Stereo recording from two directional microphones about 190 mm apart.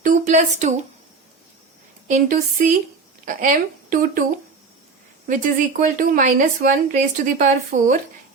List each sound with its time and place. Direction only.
0.0 s a sound: 40° right (ahead or behind)
2.0 s speech: 45° right (ahead or behind)
5.3 s speech: 45° right (ahead or behind)